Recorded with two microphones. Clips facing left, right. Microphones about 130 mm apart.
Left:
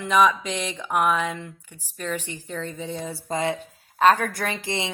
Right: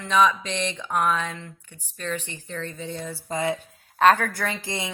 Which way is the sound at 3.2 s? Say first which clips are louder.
Even; 25° left (ahead or behind).